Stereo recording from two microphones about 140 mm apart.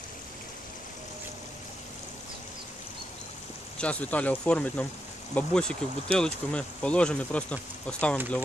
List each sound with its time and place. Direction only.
3.7 s speech: 10° left (ahead or behind)